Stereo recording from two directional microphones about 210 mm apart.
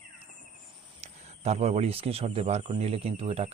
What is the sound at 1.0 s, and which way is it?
Speech, 30° right (ahead or behind).